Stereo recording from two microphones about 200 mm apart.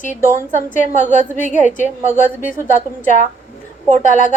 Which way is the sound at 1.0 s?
40° left (ahead or behind).